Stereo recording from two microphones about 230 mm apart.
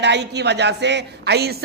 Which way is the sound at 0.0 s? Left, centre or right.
Right.